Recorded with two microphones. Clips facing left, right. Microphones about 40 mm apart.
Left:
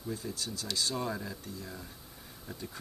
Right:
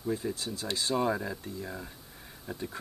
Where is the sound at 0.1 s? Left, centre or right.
Right.